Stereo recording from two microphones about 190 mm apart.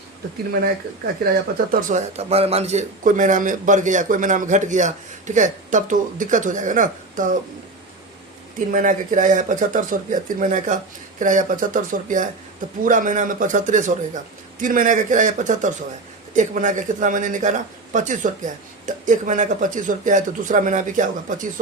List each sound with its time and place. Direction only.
1.7 s a man's voice: 40° right (ahead or behind)
8.5 s a man's voice: 45° right (ahead or behind)